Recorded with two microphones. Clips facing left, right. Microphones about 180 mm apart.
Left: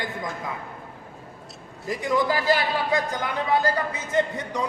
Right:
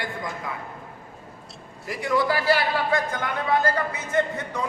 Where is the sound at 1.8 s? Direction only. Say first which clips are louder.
Even; 20° left (ahead or behind).